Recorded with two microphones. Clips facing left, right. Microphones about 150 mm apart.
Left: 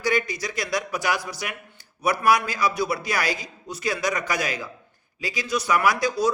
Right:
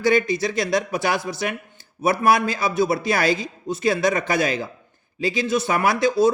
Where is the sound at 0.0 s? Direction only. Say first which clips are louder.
Right 6 dB; 25° right (ahead or behind).